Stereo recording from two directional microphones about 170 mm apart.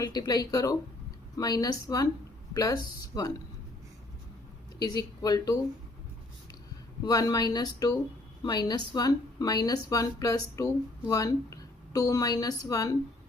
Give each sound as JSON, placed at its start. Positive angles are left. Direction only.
{"t": 0.0, "sound": "speech", "side_deg": 25}
{"t": 4.8, "sound": "speech", "side_deg": 25}
{"t": 7.0, "sound": "a woman's voice", "side_deg": 20}